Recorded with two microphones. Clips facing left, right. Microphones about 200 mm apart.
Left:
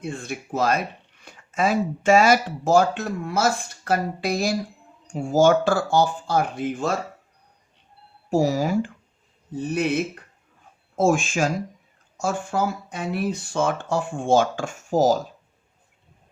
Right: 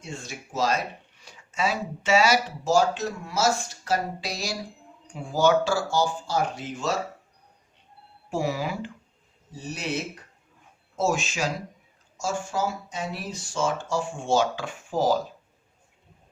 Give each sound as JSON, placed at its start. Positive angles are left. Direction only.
{"t": 0.0, "sound": "speech", "side_deg": 55}
{"t": 8.3, "sound": "speech", "side_deg": 40}
{"t": 9.5, "sound": "speech", "side_deg": 55}